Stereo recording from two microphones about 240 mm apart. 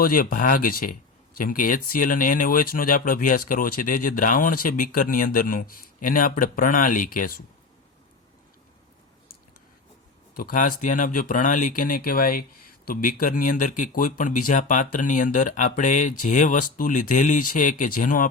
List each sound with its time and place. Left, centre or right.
0.0 s speech: left
10.3 s speech: left